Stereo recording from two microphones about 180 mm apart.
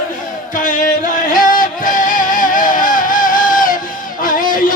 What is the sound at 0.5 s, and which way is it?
Music, 45° left (ahead or behind).